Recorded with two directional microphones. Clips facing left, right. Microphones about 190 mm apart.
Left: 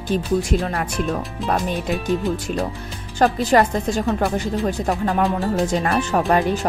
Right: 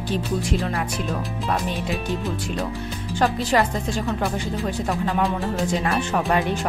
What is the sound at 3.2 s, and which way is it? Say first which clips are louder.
Speech: left 4 dB; 40° left (ahead or behind).